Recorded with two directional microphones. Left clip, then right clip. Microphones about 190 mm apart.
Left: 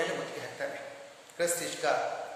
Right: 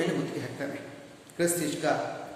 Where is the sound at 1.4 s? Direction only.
10° right (ahead or behind).